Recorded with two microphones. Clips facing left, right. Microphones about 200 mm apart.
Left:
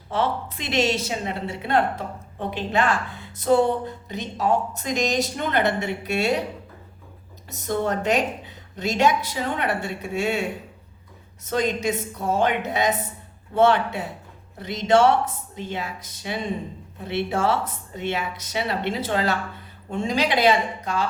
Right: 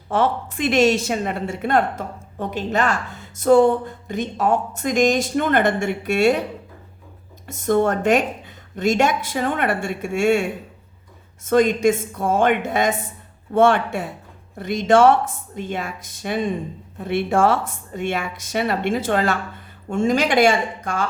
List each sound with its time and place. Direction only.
0.1 s speech: 50° right (ahead or behind)
7.4 s speech: 50° right (ahead or behind)
11.4 s speech: 50° right (ahead or behind)